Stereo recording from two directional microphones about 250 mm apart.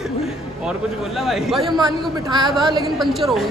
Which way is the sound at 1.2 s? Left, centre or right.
Centre.